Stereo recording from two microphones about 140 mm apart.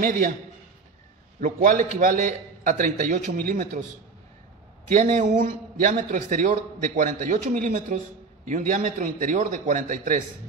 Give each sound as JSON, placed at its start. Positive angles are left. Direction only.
{"t": 0.0, "sound": "a man's voice", "side_deg": -80}
{"t": 1.4, "sound": "speech", "side_deg": -75}
{"t": 4.8, "sound": "a man's voice", "side_deg": -65}